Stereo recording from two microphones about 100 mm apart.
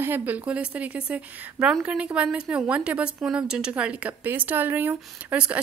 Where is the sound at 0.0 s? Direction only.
20° right (ahead or behind).